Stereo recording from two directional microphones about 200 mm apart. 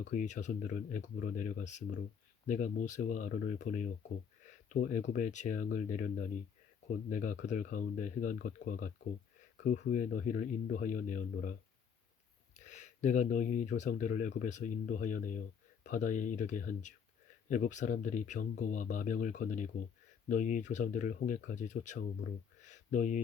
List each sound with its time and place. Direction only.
0.0 s speech: 40° left (ahead or behind)
12.5 s speech: 35° left (ahead or behind)
22.6 s a sound: 40° left (ahead or behind)